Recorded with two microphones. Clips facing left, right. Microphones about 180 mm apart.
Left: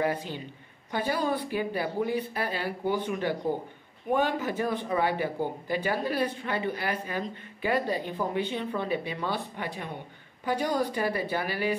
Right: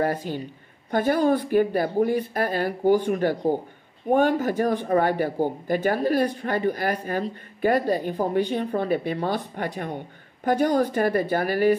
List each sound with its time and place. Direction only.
0.0 s speech: 45° right (ahead or behind)